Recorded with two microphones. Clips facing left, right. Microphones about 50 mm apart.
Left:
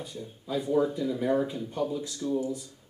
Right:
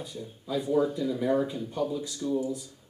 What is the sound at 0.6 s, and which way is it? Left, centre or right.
Speech, centre.